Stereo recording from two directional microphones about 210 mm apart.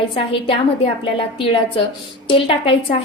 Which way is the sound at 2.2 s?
25° left (ahead or behind).